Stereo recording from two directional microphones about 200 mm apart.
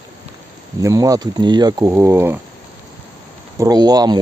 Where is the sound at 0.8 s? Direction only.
15° right (ahead or behind).